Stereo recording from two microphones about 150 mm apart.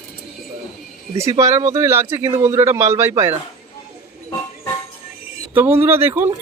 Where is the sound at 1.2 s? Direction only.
20° right (ahead or behind).